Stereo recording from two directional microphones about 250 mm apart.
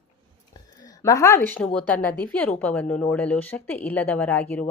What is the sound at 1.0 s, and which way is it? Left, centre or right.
A woman's voice, centre.